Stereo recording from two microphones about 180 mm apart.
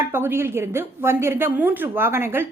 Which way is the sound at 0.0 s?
10° right (ahead or behind).